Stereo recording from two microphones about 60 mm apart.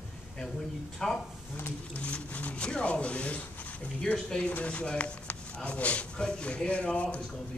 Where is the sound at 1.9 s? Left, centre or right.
Left.